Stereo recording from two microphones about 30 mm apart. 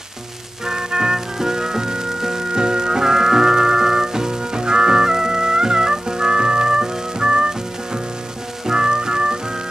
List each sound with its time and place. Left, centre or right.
0.7 s music: centre